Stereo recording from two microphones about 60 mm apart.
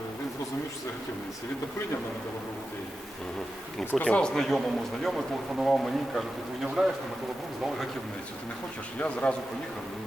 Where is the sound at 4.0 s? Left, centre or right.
Centre.